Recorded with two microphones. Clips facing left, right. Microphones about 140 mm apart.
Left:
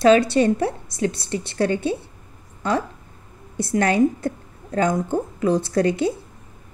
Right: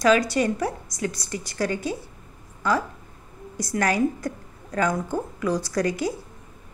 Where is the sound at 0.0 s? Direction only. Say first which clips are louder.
Left 5 dB; 30° left (ahead or behind).